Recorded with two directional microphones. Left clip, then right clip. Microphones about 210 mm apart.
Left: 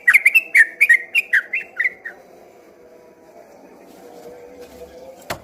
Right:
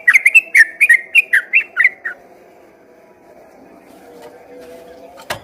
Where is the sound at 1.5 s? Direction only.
25° right (ahead or behind).